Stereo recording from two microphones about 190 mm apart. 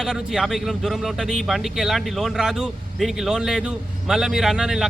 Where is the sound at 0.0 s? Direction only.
Centre (ahead or behind).